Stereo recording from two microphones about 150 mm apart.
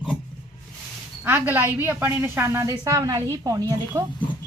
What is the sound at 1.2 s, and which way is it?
A woman's voice, 15° right (ahead or behind).